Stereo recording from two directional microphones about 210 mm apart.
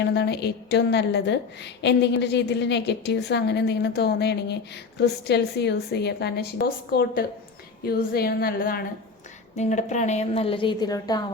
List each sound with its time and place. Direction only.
0.0 s a woman's voice: 55° left (ahead or behind); by 11.2 s 20° left (ahead or behind)